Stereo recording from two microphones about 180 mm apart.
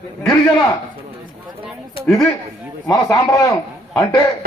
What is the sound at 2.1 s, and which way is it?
Speech, centre (ahead or behind).